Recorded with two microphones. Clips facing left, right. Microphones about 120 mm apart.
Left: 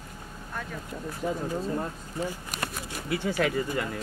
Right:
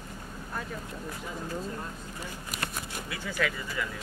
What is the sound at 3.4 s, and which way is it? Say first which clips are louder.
Speech: left 3 dB; 40° left (ahead or behind).